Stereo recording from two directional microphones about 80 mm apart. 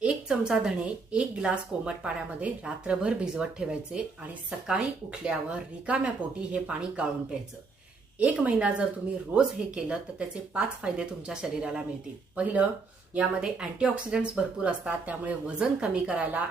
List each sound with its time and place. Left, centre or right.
0.0 s speech: centre
13.1 s speech: centre